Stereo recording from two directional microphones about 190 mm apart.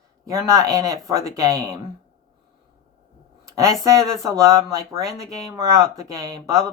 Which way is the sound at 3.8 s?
15° right (ahead or behind).